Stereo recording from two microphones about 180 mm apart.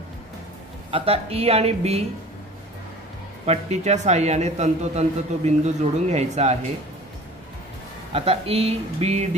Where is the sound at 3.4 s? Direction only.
35° right (ahead or behind).